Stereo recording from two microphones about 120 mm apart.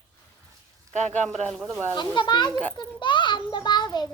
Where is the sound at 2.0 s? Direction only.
40° left (ahead or behind).